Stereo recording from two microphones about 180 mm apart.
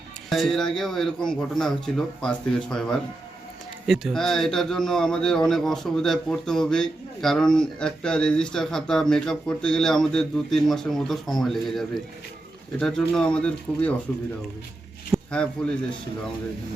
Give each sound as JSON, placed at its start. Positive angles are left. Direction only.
{"t": 0.3, "sound": "a man's voice", "side_deg": 0}
{"t": 15.1, "sound": "a man's voice", "side_deg": 5}